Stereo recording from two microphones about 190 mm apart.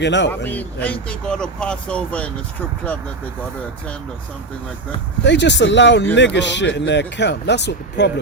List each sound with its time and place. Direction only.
0.0 s speech: 70° left (ahead or behind)
0.3 s speech: 10° left (ahead or behind)
5.2 s speech: 65° left (ahead or behind)